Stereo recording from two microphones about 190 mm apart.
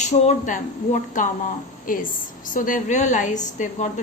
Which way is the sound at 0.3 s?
40° left (ahead or behind).